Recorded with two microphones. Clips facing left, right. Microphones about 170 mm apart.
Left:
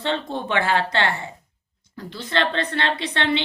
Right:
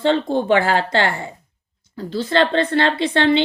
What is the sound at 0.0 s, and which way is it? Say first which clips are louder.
Speech: right 8 dB; 35° right (ahead or behind).